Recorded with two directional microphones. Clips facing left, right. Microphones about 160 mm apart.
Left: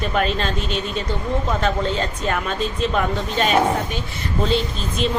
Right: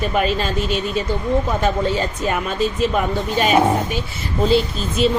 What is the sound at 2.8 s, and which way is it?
Speech, 5° right (ahead or behind).